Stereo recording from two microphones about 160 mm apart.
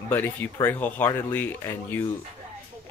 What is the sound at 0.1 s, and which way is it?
Speech, 10° left (ahead or behind).